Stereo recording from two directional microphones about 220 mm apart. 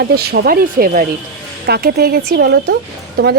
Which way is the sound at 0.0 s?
50° right (ahead or behind).